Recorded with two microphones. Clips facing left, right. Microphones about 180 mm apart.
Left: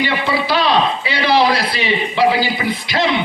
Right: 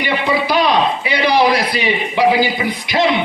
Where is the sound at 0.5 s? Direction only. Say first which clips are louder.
Even; 15° right (ahead or behind).